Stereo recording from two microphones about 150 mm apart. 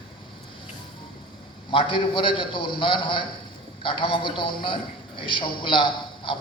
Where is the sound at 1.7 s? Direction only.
35° left (ahead or behind).